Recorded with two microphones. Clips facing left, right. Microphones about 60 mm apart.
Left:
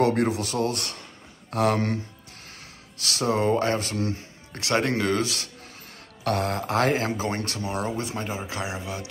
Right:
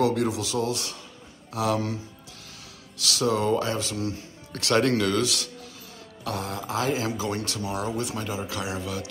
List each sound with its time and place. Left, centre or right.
0.0 s speech: left
3.0 s speech: left
4.5 s speech: left
6.2 s speech: left
7.1 s speech: left